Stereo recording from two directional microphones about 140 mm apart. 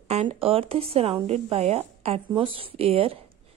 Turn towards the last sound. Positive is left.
turn(degrees=-45)  # may be behind; listen again after turning